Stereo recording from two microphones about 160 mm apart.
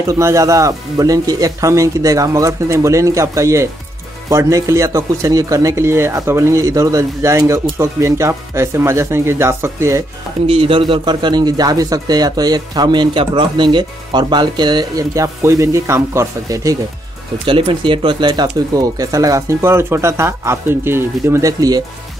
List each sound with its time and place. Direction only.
0.0 s a man's voice: 20° right (ahead or behind)
10.4 s a man's voice: 35° right (ahead or behind)
17.5 s a man's voice: 35° right (ahead or behind)